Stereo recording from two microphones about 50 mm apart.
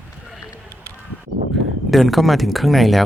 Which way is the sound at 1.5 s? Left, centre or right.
Centre.